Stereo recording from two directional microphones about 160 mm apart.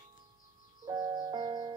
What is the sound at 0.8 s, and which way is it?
Music, 25° right (ahead or behind).